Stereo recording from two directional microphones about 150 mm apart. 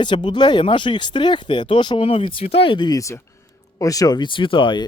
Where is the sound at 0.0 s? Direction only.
30° left (ahead or behind).